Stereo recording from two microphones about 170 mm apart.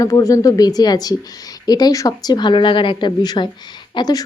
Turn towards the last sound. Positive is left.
turn(degrees=25)  # may be behind; listen again after turning